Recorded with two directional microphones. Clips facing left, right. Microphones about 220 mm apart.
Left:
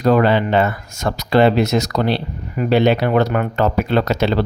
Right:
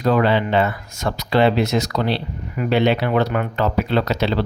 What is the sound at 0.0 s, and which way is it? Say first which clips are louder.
Speech: left 3 dB; 45° left (ahead or behind).